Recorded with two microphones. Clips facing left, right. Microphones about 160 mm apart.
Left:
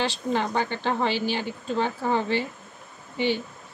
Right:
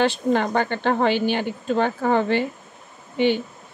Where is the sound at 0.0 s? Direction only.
55° right (ahead or behind).